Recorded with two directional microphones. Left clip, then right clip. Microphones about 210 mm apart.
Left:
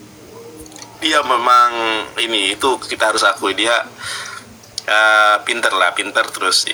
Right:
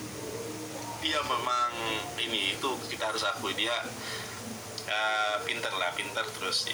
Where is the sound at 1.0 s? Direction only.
50° left (ahead or behind).